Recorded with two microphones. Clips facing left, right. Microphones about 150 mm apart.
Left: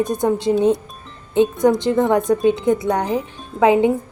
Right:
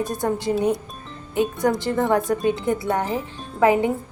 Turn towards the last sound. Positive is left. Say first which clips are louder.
# left 4 dB
turn(degrees=20)  # may be behind; listen again after turning